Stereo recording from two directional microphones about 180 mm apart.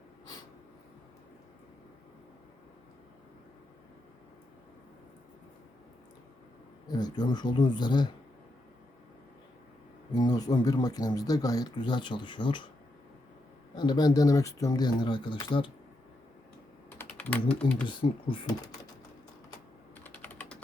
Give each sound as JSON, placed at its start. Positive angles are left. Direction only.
{"t": 6.8, "sound": "speech", "side_deg": 25}
{"t": 10.1, "sound": "speech", "side_deg": 20}
{"t": 13.7, "sound": "speech", "side_deg": 25}
{"t": 17.0, "sound": "speech", "side_deg": 10}
{"t": 17.8, "sound": "speech", "side_deg": 25}
{"t": 20.1, "sound": "typing", "side_deg": 10}